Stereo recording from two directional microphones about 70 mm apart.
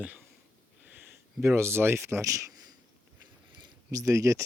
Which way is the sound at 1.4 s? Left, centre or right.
Right.